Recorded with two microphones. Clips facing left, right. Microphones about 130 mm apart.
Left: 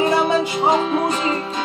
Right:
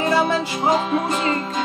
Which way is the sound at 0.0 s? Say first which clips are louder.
Left 2 dB; 15° left (ahead or behind).